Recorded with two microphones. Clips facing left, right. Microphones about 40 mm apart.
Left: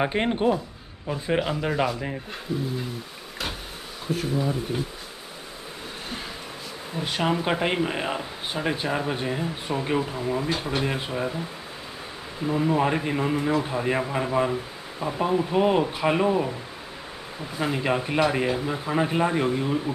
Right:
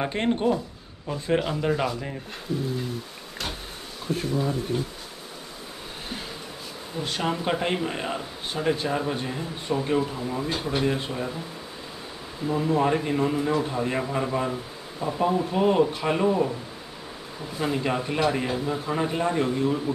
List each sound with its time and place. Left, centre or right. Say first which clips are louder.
0.0 s speech: left 1 dB; centre
4.1 s speech: left 1 dB; centre
7.0 s speech: left 2 dB; centre
12.4 s speech: even; centre
17.6 s speech: left 1 dB; centre